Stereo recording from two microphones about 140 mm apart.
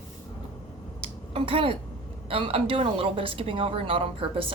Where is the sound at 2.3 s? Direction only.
40° right (ahead or behind).